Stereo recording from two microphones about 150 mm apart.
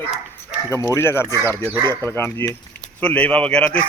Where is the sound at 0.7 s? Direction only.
15° left (ahead or behind).